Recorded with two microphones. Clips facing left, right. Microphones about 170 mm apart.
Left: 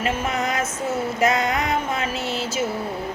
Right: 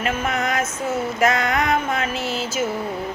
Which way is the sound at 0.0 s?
35° left (ahead or behind).